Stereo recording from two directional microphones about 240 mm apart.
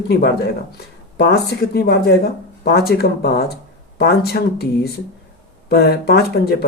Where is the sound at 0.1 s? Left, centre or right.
Left.